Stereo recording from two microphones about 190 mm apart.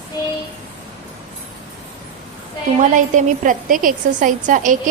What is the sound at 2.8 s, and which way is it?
A woman's voice, 40° right (ahead or behind).